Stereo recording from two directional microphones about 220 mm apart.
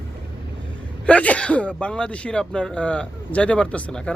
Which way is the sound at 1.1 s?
5° left (ahead or behind).